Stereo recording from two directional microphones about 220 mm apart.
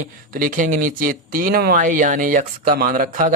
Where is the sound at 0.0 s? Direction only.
40° right (ahead or behind).